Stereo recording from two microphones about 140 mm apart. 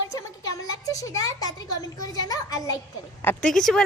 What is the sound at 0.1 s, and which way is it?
Speech, 25° left (ahead or behind).